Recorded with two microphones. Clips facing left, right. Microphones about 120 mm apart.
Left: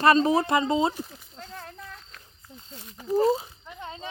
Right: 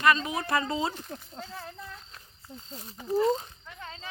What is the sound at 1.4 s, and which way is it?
Speech, 5° right (ahead or behind).